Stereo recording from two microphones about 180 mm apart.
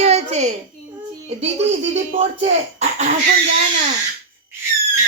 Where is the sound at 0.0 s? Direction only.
35° right (ahead or behind).